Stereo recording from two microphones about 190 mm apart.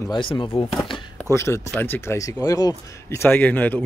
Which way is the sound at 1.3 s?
15° left (ahead or behind).